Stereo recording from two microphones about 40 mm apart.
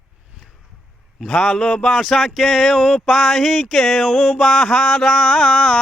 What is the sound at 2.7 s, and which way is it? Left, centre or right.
Mantra, centre.